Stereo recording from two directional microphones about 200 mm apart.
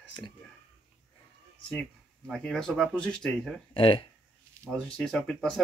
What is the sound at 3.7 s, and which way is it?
Speech, 25° left (ahead or behind).